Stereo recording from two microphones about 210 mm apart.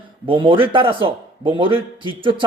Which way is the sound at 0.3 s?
25° right (ahead or behind).